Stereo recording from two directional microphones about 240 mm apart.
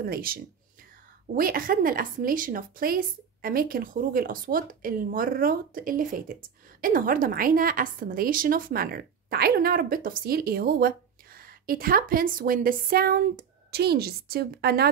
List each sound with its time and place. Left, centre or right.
0.0 s a woman's voice: right